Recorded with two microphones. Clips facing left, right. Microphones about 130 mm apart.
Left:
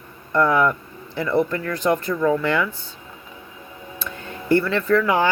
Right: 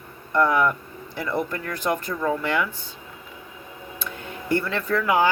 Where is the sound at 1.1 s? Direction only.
10° right (ahead or behind).